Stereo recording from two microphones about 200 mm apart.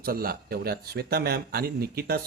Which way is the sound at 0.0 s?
50° right (ahead or behind).